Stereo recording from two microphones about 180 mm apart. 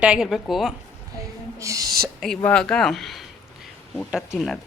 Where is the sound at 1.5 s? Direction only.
15° right (ahead or behind).